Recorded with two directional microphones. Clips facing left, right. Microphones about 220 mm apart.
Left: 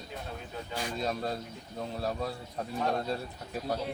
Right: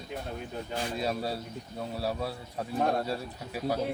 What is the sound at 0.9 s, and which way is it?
A man's voice, 5° right (ahead or behind).